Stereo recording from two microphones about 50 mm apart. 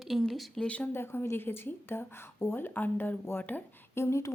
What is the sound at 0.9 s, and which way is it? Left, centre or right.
Speech, left.